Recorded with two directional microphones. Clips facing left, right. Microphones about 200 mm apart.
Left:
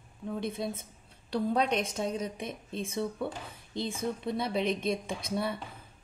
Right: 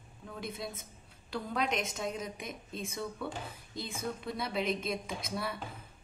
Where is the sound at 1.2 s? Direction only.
35° left (ahead or behind).